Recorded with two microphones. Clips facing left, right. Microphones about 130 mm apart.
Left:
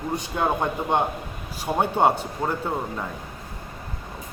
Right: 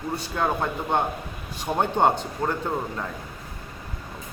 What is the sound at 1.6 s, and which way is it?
Speech, 5° left (ahead or behind).